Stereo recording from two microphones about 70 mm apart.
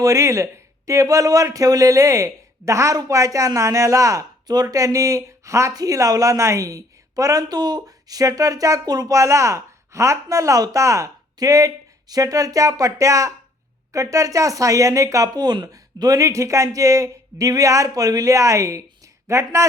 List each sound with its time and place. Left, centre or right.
0.0 s speech: right
4.4 s speech: right
7.4 s speech: right
8.9 s speech: right
9.1 s speech: right
15.3 s speech: right